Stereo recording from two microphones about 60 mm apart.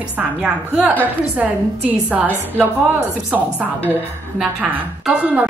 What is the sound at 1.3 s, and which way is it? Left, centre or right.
Speech, right.